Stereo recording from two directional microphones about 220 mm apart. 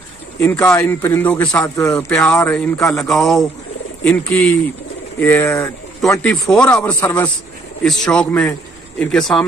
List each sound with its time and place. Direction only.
0.4 s a man's voice: 10° left (ahead or behind)
8.0 s a man's voice: 5° left (ahead or behind)